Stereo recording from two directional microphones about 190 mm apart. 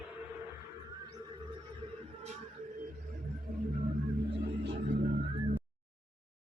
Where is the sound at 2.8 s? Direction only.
40° right (ahead or behind).